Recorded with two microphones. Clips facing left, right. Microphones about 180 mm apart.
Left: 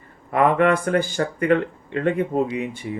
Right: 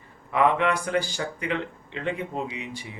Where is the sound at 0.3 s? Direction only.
50° left (ahead or behind).